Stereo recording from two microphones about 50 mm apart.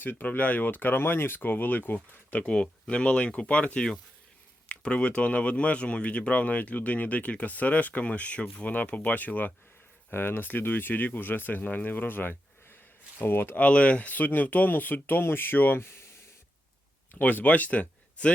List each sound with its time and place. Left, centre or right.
0.0 s speech: left
2.5 s speech: centre; by 9.5 s left
10.1 s speech: left
13.6 s speech: left
17.2 s speech: left